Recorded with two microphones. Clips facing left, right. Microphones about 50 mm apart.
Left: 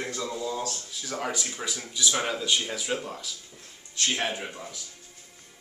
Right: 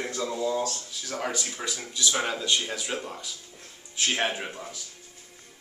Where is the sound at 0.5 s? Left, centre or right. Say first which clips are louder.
Right 4 dB; centre.